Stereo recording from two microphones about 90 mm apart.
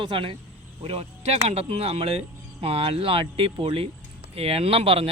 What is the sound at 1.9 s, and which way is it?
Speech, 90° right.